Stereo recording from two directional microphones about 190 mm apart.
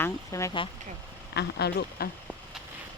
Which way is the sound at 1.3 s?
60° left (ahead or behind).